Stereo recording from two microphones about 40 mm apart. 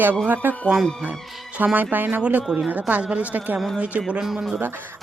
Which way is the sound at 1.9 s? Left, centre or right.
Right.